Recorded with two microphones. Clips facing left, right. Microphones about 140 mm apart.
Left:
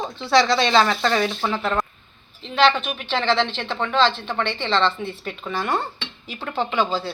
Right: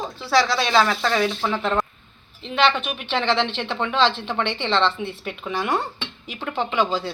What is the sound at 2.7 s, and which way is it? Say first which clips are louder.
A woman's voice: left 2 dB; 10° right (ahead or behind).